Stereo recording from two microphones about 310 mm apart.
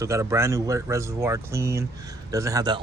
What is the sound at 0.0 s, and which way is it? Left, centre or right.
Speech, centre.